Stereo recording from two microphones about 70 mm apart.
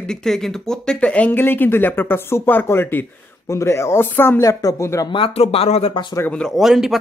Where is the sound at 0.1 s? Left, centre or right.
Centre; by 3.1 s left.